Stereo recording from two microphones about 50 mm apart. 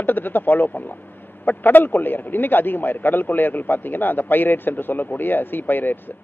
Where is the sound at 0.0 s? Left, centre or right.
Left.